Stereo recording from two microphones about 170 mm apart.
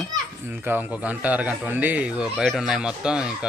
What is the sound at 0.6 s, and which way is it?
A man's voice, 10° right (ahead or behind).